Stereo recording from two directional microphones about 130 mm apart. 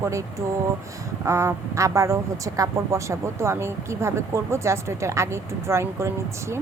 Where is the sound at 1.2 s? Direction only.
20° right (ahead or behind).